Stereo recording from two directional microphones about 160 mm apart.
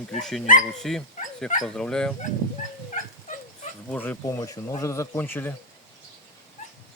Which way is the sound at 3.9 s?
10° left (ahead or behind).